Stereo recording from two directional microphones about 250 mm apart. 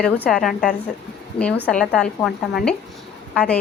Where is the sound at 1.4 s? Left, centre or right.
Left.